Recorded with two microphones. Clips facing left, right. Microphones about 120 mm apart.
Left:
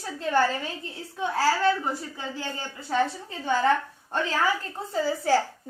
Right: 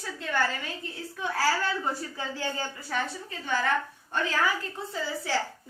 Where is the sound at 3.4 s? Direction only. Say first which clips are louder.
Left 5 dB; 30° left (ahead or behind).